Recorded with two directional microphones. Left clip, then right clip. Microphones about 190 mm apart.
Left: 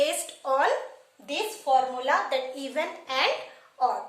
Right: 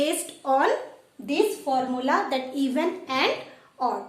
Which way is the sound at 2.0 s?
20° right (ahead or behind).